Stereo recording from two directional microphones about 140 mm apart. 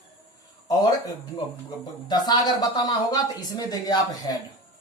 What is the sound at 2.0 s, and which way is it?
A woman's voice, 30° left (ahead or behind).